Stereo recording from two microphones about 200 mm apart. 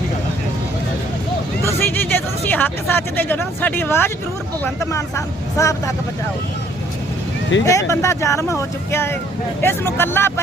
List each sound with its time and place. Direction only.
1.6 s speech: 10° left (ahead or behind)
7.6 s speech: 15° left (ahead or behind)